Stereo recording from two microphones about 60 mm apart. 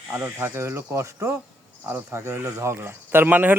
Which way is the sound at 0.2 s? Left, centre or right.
Right.